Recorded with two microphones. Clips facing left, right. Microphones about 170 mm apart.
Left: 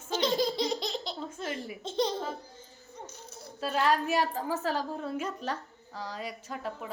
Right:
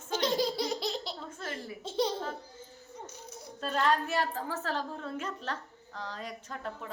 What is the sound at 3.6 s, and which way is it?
A woman's voice, 5° left (ahead or behind).